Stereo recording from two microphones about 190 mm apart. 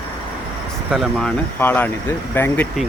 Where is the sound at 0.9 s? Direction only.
Centre (ahead or behind).